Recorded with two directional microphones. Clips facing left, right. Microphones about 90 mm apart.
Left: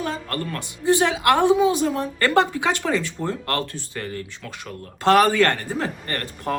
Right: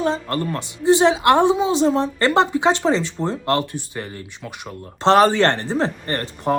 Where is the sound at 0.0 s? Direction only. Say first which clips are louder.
Right 6 dB; 25° right (ahead or behind).